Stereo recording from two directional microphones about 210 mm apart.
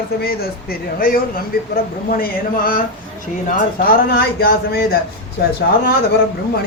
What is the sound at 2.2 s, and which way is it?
Speech, 45° left (ahead or behind).